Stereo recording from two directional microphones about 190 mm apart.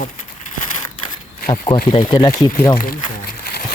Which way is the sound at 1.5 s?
25° left (ahead or behind).